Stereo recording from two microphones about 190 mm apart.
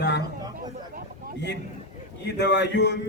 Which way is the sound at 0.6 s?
50° right (ahead or behind).